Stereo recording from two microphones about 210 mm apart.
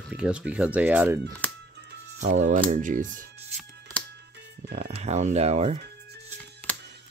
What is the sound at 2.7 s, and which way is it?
Speech, 40° right (ahead or behind).